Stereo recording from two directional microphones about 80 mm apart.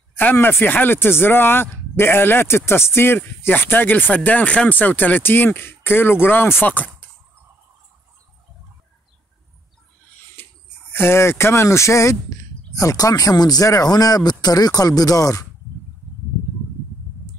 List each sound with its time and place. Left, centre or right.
0.1 s speech: left
10.3 s speech: left